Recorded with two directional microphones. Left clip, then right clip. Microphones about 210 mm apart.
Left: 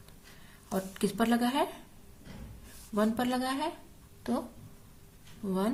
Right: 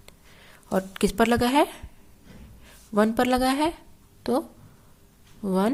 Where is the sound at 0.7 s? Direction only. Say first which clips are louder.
Right 8 dB; 50° right (ahead or behind).